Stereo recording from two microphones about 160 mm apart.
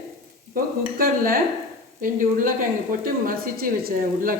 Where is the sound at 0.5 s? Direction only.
65° right (ahead or behind).